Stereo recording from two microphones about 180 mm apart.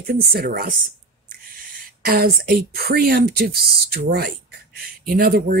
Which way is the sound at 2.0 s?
55° right (ahead or behind).